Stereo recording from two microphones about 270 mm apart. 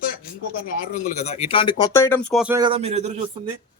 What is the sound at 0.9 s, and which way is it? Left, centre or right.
Speech, left.